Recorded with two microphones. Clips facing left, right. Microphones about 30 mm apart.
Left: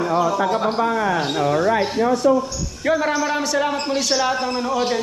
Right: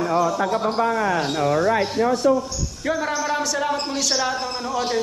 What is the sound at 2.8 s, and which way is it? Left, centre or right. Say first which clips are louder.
A man's voice: left 4 dB; centre.